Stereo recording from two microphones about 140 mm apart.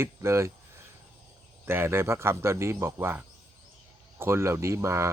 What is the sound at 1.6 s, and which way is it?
Speech, 15° right (ahead or behind).